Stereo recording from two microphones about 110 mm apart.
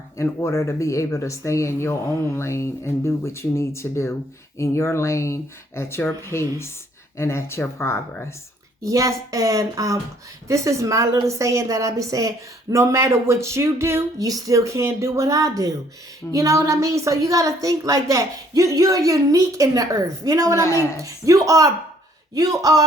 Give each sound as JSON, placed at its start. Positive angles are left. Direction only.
{"t": 0.2, "sound": "speech", "side_deg": 25}
{"t": 8.8, "sound": "a woman's voice", "side_deg": -30}